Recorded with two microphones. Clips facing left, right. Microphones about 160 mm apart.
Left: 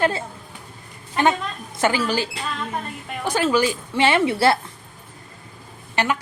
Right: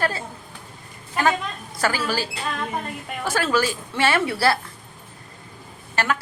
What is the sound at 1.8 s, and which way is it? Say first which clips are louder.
Speech: left 3 dB; 20° left (ahead or behind).